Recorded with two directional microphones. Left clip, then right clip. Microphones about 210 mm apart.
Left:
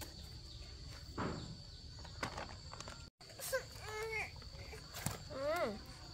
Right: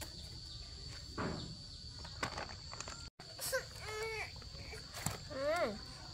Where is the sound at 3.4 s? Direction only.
10° right (ahead or behind).